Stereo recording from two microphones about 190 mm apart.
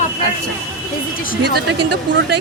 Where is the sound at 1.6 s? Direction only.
60° right (ahead or behind).